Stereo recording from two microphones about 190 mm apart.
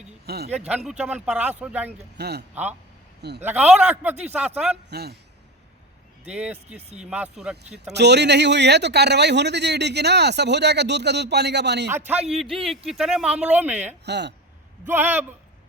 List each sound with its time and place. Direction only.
0.3 s speech: 55° right (ahead or behind)
0.9 s speech: 5° right (ahead or behind)
2.1 s a man's voice: 60° right (ahead or behind)
3.4 s speech: 5° right (ahead or behind)
4.9 s speech: 55° right (ahead or behind)
6.2 s speech: 5° right (ahead or behind)
7.9 s speech: 65° right (ahead or behind)
11.9 s speech: 10° right (ahead or behind)
12.3 s speech: centre (ahead or behind)
14.0 s speech: 65° right (ahead or behind)
14.8 s speech: 10° right (ahead or behind)